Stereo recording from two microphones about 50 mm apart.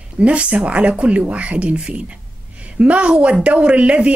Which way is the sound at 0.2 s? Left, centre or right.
Right.